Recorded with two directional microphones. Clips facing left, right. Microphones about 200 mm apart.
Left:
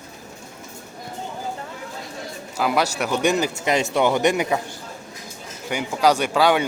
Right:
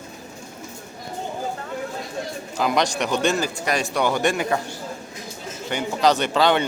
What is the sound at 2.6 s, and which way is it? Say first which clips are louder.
Speech: even; 5° left (ahead or behind).